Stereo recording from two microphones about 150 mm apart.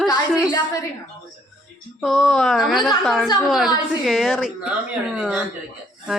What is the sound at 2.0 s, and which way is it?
Speech, centre (ahead or behind).